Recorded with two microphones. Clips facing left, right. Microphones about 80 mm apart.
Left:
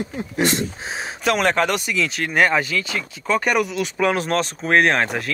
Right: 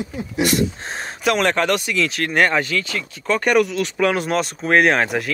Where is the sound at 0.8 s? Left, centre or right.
Centre.